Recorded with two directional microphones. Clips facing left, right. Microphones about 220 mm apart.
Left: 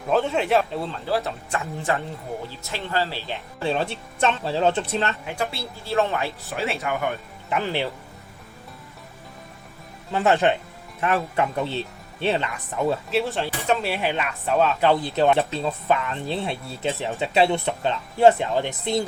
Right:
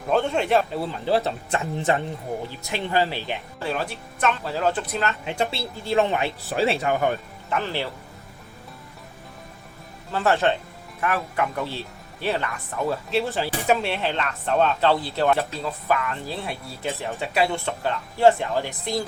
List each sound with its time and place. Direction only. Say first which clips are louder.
0.1 s a man's voice: even; centre (ahead or behind)
1.0 s speech: right 5 dB; 25° right (ahead or behind)
3.6 s speech: left 5 dB; 25° left (ahead or behind)
5.2 s speech: right 2 dB; 20° right (ahead or behind)
6.6 s speech: right 5 dB; 30° right (ahead or behind)
7.5 s speech: left 2 dB; 15° left (ahead or behind)
10.1 s speech: left 2 dB; 20° left (ahead or behind)
12.8 s a man's voice: left 1 dB; centre (ahead or behind)
13.6 s speech: right 2 dB; 10° right (ahead or behind)
13.8 s speech: left 1 dB; 10° left (ahead or behind)
14.8 s speech: left 2 dB; 20° left (ahead or behind)